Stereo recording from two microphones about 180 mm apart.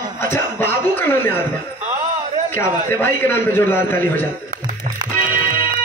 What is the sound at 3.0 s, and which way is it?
A man's voice, 15° left (ahead or behind).